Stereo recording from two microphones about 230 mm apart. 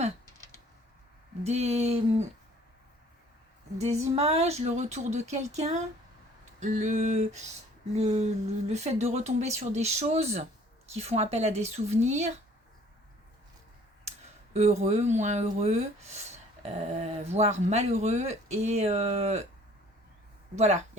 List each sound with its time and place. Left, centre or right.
1.5 s speech: right
3.8 s speech: right
6.6 s a sound: right
7.9 s speech: right
14.5 s speech: right
20.6 s speech: right